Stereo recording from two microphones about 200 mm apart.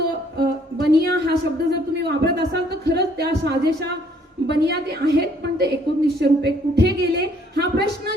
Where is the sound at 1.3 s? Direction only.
55° right (ahead or behind).